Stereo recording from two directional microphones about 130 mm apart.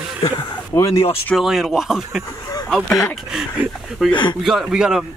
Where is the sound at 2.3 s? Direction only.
25° left (ahead or behind).